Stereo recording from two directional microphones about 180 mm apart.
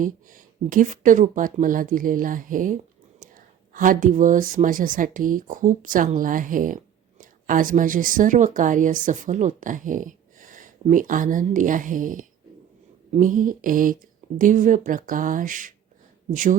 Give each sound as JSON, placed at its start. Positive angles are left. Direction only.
{"t": 0.0, "sound": "speech", "side_deg": -50}